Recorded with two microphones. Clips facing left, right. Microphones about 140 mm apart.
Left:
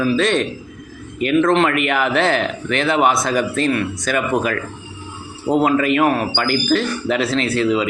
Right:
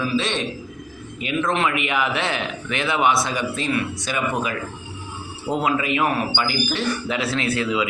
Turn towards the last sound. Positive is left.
turn(degrees=40)  # may be behind; listen again after turning